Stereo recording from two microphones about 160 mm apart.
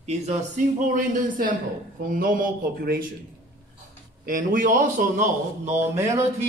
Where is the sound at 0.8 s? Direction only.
55° right (ahead or behind).